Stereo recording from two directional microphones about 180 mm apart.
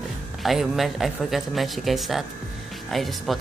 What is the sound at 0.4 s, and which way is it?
Speech, centre (ahead or behind).